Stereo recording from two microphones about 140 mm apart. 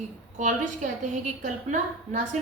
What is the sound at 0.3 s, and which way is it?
Speech, 60° right (ahead or behind).